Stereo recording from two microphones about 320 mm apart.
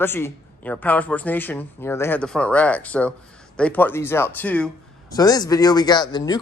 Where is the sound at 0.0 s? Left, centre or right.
Centre.